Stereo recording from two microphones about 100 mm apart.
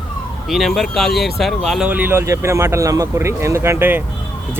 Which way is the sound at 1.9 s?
15° right (ahead or behind).